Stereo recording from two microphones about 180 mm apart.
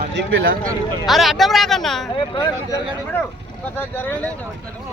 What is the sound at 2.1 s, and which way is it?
Speech, 25° left (ahead or behind).